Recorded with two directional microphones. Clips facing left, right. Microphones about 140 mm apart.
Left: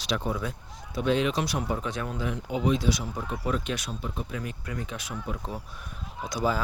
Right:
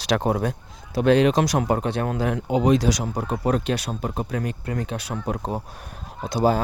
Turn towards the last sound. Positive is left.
turn(degrees=-65)  # may be behind; listen again after turning